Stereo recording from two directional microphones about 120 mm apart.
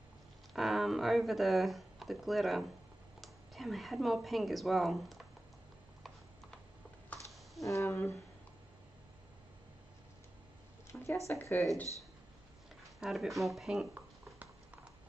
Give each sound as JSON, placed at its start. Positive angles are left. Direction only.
{"t": 0.5, "sound": "speech", "side_deg": 0}
{"t": 7.6, "sound": "speech", "side_deg": 25}
{"t": 10.9, "sound": "a sound", "side_deg": 10}
{"t": 11.2, "sound": "speech", "side_deg": 20}
{"t": 13.0, "sound": "speech", "side_deg": 0}
{"t": 13.9, "sound": "a sound", "side_deg": -15}